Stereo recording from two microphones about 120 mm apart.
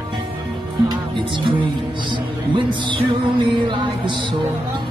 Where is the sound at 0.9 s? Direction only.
45° right (ahead or behind).